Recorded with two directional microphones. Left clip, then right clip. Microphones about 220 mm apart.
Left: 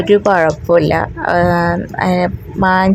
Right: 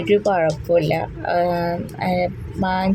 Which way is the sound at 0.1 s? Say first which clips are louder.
Left 6 dB; 20° left (ahead or behind).